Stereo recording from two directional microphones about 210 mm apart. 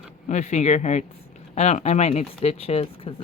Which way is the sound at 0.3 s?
35° left (ahead or behind).